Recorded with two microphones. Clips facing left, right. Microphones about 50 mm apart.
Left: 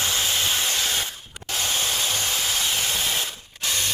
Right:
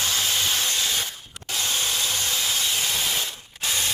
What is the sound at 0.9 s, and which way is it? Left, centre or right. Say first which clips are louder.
Spray: left 1 dB; left.